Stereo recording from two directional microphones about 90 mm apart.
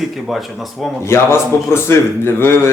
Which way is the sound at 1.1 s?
30° left (ahead or behind).